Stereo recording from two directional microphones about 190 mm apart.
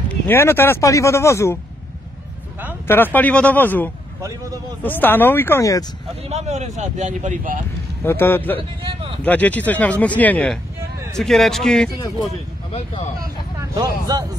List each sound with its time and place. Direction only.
0.1 s speech: 10° left (ahead or behind)
2.9 s speech: 10° left (ahead or behind)
4.2 s a man's voice: 15° right (ahead or behind)
4.8 s speech: 10° left (ahead or behind)
6.2 s speech: 35° right (ahead or behind)
8.0 s a man's voice: 10° left (ahead or behind)
12.7 s speech: 30° left (ahead or behind)
13.7 s speech: 20° right (ahead or behind)